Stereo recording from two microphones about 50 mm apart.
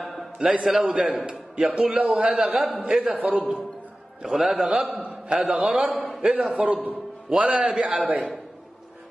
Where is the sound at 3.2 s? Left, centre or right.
Right.